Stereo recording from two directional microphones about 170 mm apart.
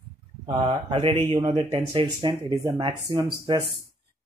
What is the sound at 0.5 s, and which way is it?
Speech, 30° right (ahead or behind).